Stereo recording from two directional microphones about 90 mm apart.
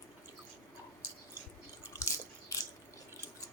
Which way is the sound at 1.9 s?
40° left (ahead or behind).